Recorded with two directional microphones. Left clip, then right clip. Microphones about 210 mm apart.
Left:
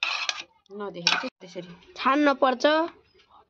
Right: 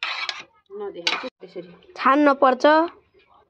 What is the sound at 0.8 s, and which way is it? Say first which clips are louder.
Speech: even; 55° left (ahead or behind).